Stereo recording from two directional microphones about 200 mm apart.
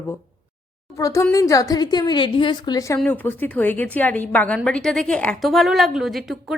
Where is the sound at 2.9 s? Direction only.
5° left (ahead or behind).